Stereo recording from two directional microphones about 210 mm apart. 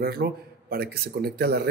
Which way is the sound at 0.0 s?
45° right (ahead or behind).